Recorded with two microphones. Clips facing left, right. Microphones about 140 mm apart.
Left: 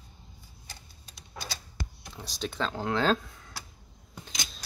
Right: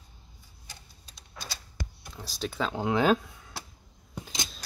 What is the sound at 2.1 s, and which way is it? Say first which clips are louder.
Speech: right 1 dB; centre (ahead or behind).